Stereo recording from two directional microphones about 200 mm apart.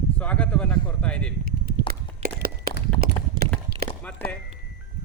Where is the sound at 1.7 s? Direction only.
50° right (ahead or behind).